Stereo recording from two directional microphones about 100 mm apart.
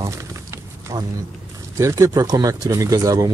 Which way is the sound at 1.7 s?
35° right (ahead or behind).